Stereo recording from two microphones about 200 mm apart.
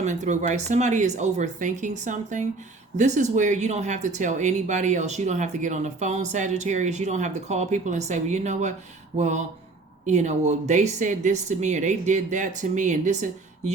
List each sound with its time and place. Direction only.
0.0 s speech: 35° right (ahead or behind)